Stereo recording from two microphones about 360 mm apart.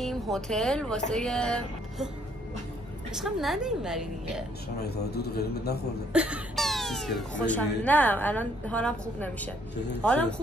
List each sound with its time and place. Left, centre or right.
0.0 s speech: centre
3.2 s speech: centre
4.7 s a man's voice: left
6.1 s speech: centre